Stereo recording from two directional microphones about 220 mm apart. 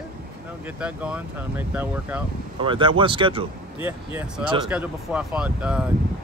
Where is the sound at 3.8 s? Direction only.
10° right (ahead or behind).